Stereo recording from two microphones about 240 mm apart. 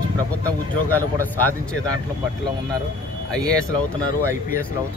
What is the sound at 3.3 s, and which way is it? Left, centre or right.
Speech, centre.